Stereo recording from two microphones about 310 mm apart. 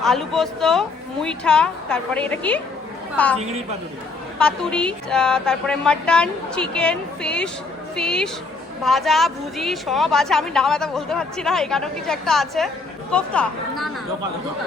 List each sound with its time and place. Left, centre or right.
0.0 s a woman's voice: centre
3.3 s a woman's voice: right
4.4 s a woman's voice: centre